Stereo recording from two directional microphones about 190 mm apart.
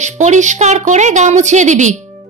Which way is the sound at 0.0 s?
40° right (ahead or behind).